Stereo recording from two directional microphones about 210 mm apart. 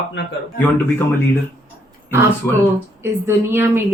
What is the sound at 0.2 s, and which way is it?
Speech, 55° left (ahead or behind).